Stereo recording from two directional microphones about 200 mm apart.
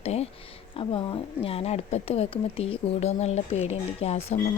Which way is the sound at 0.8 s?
25° left (ahead or behind).